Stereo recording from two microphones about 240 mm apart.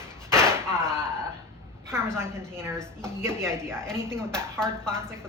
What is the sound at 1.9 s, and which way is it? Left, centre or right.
A woman's voice, centre.